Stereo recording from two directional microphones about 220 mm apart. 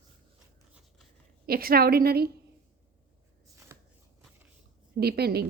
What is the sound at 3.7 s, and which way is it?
Shuffling cards, 10° right (ahead or behind).